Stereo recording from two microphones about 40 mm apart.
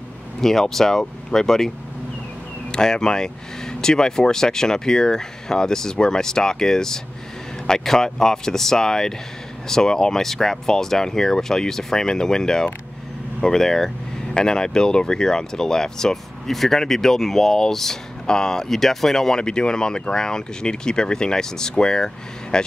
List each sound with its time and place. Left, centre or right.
0.4 s speech: centre
2.7 s speech: centre